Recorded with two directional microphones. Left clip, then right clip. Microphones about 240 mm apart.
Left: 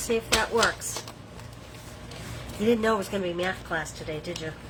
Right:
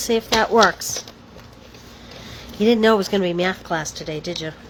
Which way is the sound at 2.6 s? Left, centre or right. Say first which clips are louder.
Right 8 dB; right.